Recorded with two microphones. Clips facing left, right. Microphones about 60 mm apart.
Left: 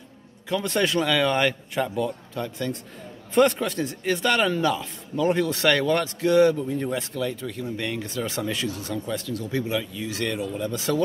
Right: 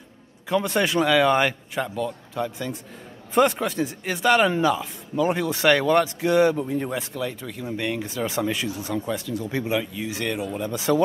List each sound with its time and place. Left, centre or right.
0.7 s speech: centre
1.8 s speech: centre
2.4 s speech: centre